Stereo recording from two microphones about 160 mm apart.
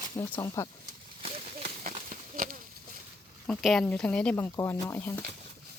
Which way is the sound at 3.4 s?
5° left (ahead or behind).